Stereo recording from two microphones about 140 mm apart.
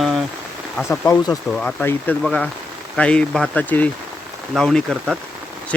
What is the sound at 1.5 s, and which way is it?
Speech, 10° left (ahead or behind).